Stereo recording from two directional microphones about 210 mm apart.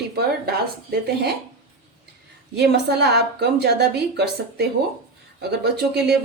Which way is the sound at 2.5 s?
50° right (ahead or behind).